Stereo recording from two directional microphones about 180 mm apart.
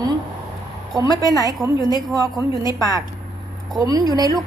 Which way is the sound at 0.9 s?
20° right (ahead or behind).